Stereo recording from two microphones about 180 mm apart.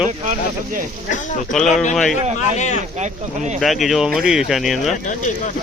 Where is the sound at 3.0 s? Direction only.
40° right (ahead or behind).